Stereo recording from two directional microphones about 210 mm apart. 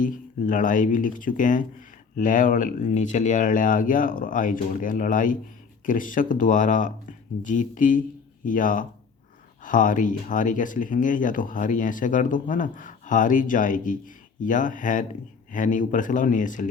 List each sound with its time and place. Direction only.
0.0 s speech: 40° left (ahead or behind)